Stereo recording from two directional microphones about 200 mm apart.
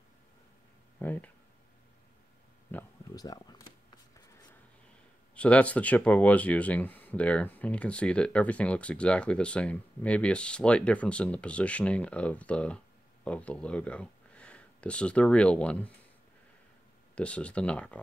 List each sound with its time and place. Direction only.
0.9 s speech: 10° left (ahead or behind)
2.7 s a sound: 20° left (ahead or behind)
5.3 s speech: 5° left (ahead or behind)
17.1 s speech: 5° left (ahead or behind)